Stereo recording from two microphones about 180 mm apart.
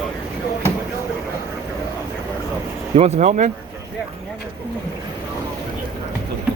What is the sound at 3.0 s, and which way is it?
Speech, 40° right (ahead or behind).